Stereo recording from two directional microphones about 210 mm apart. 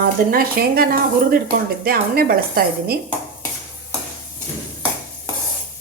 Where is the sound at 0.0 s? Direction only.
45° right (ahead or behind).